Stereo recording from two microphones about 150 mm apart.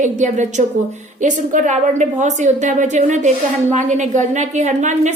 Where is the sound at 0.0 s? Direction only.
55° right (ahead or behind).